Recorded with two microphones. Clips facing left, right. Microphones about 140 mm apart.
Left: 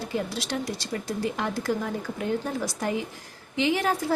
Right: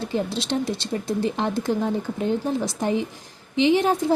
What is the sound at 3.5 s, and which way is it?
Speech, 20° right (ahead or behind).